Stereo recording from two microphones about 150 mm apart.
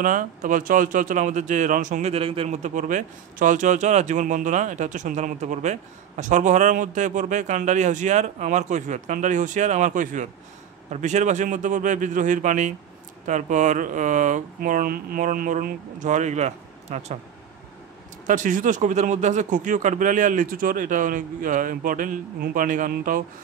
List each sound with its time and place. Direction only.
0.0 s speech: 60° right (ahead or behind)
18.2 s speech: 60° right (ahead or behind)